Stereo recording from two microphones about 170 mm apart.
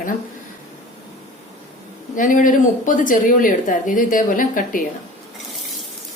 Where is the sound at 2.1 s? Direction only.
50° left (ahead or behind).